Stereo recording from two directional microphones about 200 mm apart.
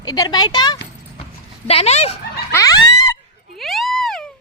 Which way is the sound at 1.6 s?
30° left (ahead or behind).